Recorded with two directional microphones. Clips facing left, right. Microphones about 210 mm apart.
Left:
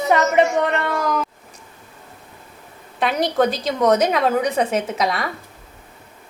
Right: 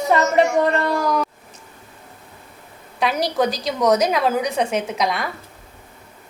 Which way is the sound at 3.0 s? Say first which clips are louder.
Left 1 dB; centre (ahead or behind).